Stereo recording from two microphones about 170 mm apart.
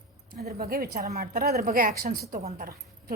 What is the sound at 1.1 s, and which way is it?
Speech, 55° right (ahead or behind).